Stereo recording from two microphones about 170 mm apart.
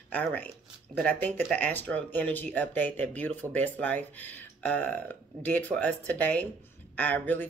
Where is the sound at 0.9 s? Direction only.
10° left (ahead or behind).